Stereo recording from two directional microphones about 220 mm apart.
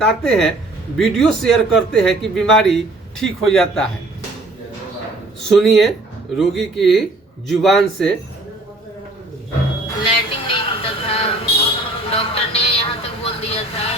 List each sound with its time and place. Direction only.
0.0 s a man's voice: centre (ahead or behind)
5.5 s a man's voice: centre (ahead or behind)
10.1 s a sound: 20° left (ahead or behind)
12.0 s vehicle: 25° left (ahead or behind)